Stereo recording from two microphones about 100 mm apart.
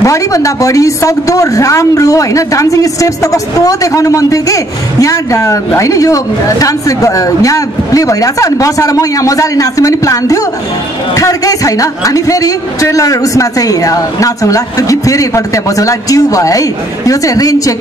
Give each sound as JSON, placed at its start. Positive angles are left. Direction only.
{"t": 0.0, "sound": "a woman's voice", "side_deg": 35}